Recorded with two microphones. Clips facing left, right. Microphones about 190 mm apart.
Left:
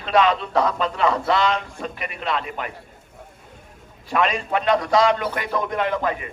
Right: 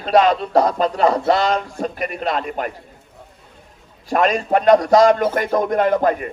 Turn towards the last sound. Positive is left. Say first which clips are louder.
# right 7 dB
turn(degrees=-45)  # may be behind; listen again after turning